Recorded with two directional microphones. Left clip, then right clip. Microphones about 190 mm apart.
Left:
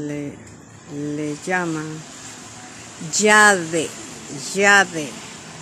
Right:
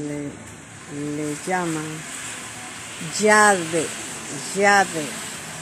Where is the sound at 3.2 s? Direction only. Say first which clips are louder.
Left 2 dB; 35° left (ahead or behind).